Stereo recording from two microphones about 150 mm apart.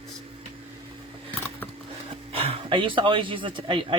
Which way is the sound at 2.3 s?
40° right (ahead or behind).